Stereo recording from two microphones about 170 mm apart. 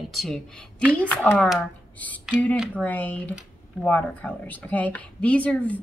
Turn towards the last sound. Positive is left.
turn(degrees=10)  # may be behind; listen again after turning